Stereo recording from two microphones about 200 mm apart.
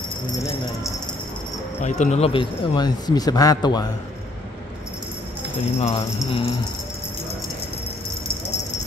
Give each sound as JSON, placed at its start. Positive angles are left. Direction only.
{"t": 1.8, "sound": "speech", "side_deg": 35}
{"t": 5.8, "sound": "speech", "side_deg": 30}